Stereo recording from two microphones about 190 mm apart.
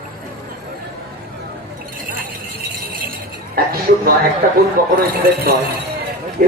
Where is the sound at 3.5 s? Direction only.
50° right (ahead or behind).